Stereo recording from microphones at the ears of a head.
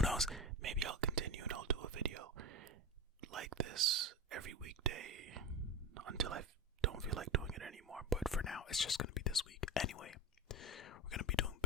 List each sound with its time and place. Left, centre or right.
0.0 s whispering: centre
0.6 s whispering: right
8.5 s whispering: left